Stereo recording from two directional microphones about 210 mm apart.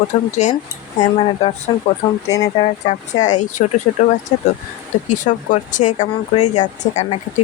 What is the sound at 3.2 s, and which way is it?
Speech, 35° left (ahead or behind).